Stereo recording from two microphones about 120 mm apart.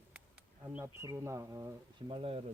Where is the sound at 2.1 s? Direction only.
50° right (ahead or behind).